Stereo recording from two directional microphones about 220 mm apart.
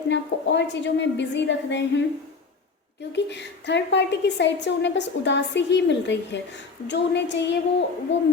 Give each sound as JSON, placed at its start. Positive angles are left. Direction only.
{"t": 0.1, "sound": "a woman's voice", "side_deg": 55}
{"t": 3.1, "sound": "a woman's voice", "side_deg": 50}